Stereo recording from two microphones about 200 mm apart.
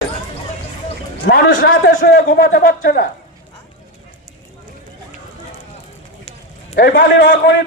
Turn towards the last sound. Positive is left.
turn(degrees=70)  # may be behind; listen again after turning